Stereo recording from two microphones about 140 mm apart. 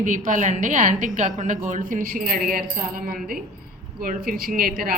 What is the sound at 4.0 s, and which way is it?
Speech, 85° right.